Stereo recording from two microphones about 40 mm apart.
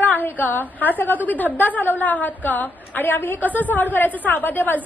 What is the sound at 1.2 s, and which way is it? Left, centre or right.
A woman's voice, left.